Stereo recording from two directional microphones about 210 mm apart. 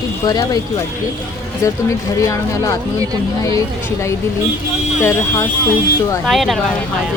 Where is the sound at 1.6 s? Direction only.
15° left (ahead or behind).